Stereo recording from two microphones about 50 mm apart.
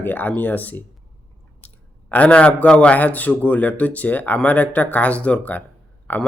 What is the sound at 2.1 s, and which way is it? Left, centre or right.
Speech, left.